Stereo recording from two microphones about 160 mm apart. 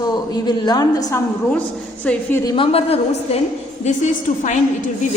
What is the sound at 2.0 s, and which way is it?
Speech, 10° left (ahead or behind).